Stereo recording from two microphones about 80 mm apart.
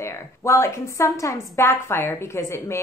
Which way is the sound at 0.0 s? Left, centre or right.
Left.